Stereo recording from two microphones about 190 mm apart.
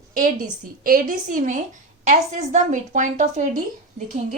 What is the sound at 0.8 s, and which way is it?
A woman's voice, 45° right (ahead or behind).